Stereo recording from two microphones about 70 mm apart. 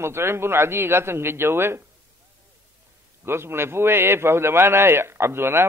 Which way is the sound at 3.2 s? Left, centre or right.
Right.